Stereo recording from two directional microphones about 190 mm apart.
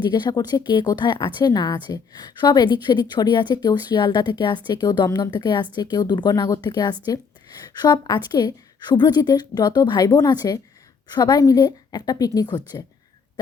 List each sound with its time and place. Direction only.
0.0 s a woman's voice: 25° left (ahead or behind)